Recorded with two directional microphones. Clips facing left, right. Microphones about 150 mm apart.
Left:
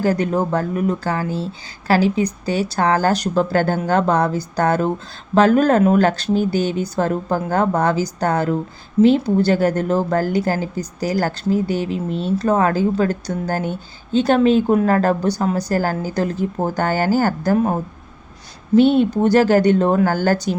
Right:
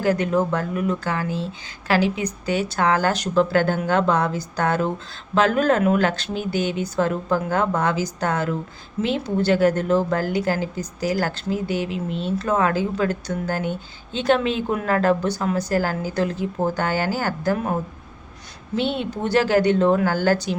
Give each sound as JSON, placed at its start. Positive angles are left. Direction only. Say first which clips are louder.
{"t": 0.0, "sound": "speech", "louder": "left 2 dB", "side_deg": 35}
{"t": 18.8, "sound": "speech", "louder": "left 10 dB", "side_deg": 45}